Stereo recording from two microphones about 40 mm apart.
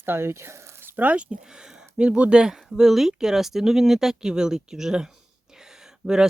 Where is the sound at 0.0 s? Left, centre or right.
Right.